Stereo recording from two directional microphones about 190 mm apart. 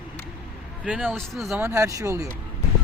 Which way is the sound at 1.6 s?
15° right (ahead or behind).